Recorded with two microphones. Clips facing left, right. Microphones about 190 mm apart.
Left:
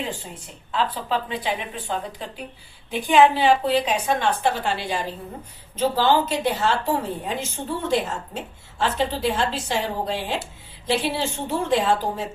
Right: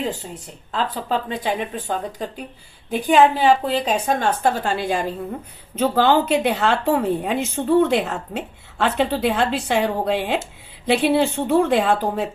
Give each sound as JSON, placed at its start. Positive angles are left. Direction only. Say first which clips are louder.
{"t": 0.7, "sound": "a woman's voice", "louder": "right 1 dB", "side_deg": -45}